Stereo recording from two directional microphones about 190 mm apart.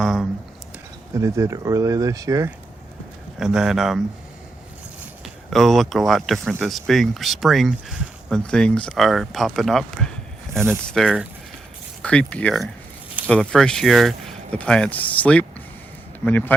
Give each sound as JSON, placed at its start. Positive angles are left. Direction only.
{"t": 0.0, "sound": "speech", "side_deg": 0}
{"t": 1.1, "sound": "speech", "side_deg": -15}
{"t": 3.3, "sound": "speech", "side_deg": 0}
{"t": 5.2, "sound": "speech", "side_deg": 0}
{"t": 10.5, "sound": "speech", "side_deg": -10}
{"t": 10.8, "sound": "speech", "side_deg": 0}